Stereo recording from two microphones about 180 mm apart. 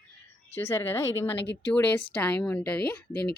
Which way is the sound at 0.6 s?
15° left (ahead or behind).